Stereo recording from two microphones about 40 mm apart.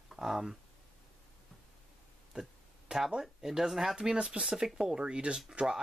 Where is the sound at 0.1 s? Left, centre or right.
Centre.